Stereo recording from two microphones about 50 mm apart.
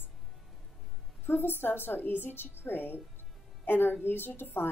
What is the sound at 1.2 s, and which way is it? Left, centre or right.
A woman's voice, left.